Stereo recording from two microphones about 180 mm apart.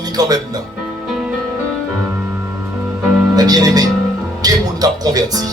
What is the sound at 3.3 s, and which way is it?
Speech, 20° right (ahead or behind).